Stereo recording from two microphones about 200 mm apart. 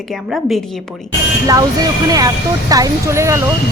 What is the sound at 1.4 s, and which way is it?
Speech, 15° right (ahead or behind).